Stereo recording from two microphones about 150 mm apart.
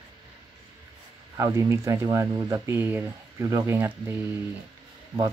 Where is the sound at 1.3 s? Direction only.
20° right (ahead or behind).